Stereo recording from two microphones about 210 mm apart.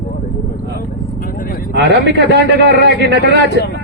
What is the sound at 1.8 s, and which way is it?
A man's voice, 55° right (ahead or behind).